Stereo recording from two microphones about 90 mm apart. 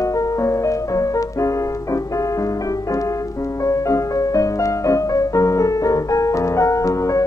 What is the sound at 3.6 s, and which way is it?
Music, 35° left (ahead or behind).